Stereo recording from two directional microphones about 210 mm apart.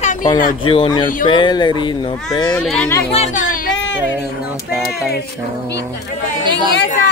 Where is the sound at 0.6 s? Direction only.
25° left (ahead or behind).